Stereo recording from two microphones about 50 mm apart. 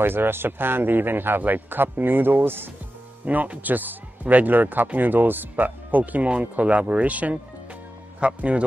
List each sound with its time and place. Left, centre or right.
0.0 s speech: right
3.3 s speech: right